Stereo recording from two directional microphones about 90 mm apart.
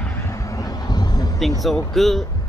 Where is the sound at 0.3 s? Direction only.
35° left (ahead or behind).